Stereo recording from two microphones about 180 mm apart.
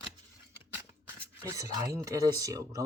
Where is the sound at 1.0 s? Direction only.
15° right (ahead or behind).